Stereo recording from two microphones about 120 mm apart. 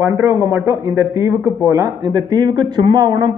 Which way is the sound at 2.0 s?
35° right (ahead or behind).